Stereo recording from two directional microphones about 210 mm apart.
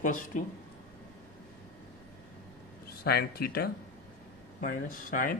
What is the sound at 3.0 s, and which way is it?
Speech, 50° left (ahead or behind).